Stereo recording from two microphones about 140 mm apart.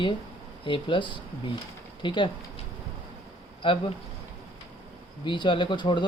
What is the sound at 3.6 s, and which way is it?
Speech, 35° left (ahead or behind).